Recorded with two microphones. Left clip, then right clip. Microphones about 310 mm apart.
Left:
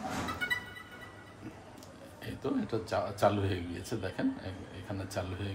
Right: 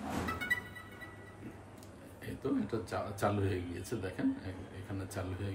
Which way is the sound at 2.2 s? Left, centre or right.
Centre.